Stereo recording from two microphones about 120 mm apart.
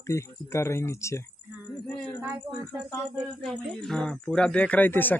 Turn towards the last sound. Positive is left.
turn(degrees=15)  # may be behind; listen again after turning